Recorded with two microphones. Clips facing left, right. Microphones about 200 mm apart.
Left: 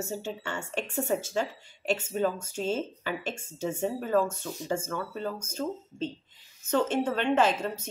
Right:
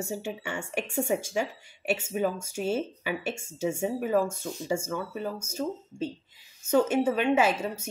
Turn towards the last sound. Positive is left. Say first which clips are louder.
# even
turn(degrees=-10)  # may be behind; listen again after turning